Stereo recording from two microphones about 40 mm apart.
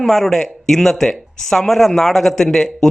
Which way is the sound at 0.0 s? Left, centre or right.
Centre.